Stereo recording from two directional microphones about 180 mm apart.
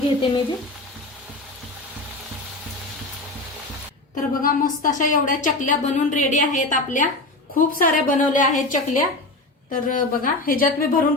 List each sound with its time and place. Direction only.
4.1 s a woman's voice: 50° left (ahead or behind)